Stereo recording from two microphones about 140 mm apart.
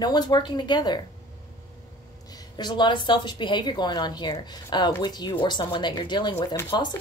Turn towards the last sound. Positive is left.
turn(degrees=35)  # may be behind; listen again after turning